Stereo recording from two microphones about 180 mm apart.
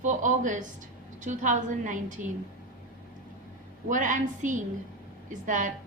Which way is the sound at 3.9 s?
45° right (ahead or behind).